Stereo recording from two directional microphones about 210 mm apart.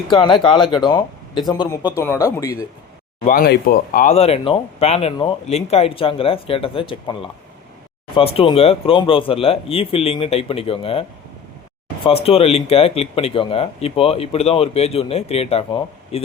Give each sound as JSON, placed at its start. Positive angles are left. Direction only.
{"t": 0.1, "sound": "speech", "side_deg": 20}
{"t": 3.2, "sound": "speech", "side_deg": 45}
{"t": 12.0, "sound": "speech", "side_deg": 25}